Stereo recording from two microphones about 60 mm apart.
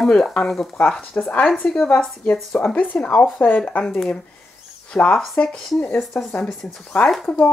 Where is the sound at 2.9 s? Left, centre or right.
Left.